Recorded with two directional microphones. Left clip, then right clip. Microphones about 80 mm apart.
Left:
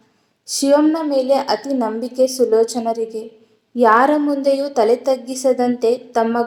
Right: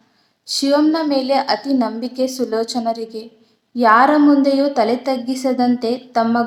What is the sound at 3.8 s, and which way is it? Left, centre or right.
Speech, centre.